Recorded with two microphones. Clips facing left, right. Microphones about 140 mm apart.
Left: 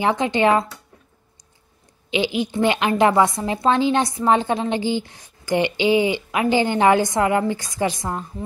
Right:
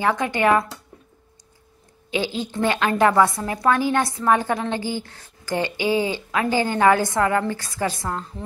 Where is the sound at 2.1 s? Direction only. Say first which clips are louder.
Left 3 dB; 15° left (ahead or behind).